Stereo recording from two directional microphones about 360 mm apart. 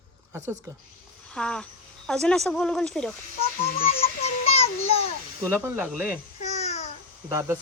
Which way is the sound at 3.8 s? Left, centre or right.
Centre.